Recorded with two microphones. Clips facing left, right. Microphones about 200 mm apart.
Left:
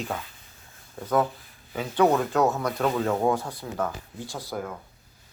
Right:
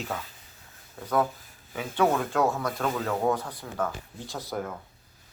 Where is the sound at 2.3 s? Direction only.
20° left (ahead or behind).